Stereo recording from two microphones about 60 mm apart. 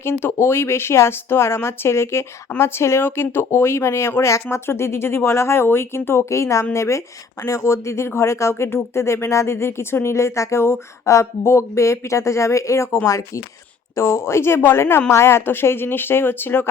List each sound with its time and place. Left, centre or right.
0.0 s speech: left
13.9 s speech: left